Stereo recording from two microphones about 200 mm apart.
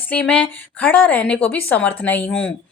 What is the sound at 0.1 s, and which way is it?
A woman's voice, 5° left (ahead or behind).